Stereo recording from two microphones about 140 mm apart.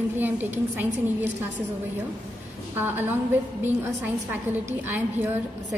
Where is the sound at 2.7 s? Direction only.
15° right (ahead or behind).